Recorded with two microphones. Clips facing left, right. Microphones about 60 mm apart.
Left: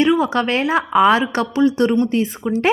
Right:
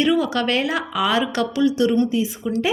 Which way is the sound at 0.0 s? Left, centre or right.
Left.